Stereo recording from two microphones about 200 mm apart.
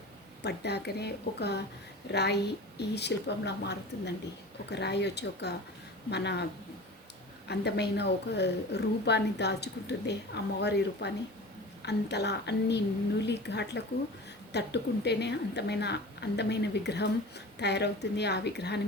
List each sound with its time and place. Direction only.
0.4 s a woman's voice: 55° left (ahead or behind)
7.4 s a woman's voice: 55° left (ahead or behind)